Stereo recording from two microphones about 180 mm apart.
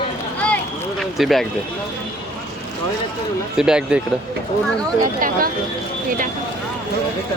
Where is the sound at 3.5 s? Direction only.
5° right (ahead or behind).